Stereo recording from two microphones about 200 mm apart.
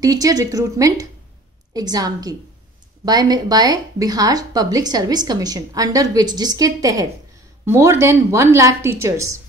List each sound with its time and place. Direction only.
0.0 s a woman's voice: 20° right (ahead or behind)